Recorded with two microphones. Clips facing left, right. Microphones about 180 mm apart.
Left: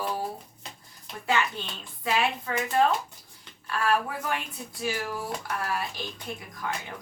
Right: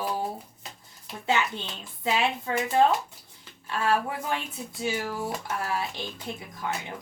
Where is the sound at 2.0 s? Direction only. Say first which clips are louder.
Right 1 dB; 20° right (ahead or behind).